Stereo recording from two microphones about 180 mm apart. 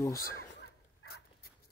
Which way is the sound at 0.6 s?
60° left (ahead or behind).